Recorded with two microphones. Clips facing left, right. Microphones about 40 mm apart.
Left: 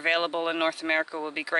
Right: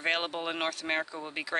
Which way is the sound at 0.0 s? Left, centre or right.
Centre.